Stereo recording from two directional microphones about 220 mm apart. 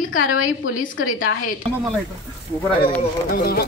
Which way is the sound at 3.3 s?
45° left (ahead or behind).